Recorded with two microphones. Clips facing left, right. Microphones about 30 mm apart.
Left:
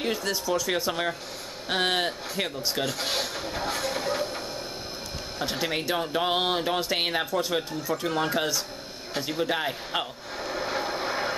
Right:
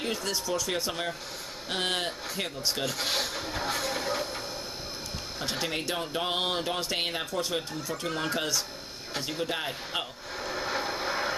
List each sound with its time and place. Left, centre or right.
0.0 s speech: centre
5.4 s speech: centre
9.1 s a sound: centre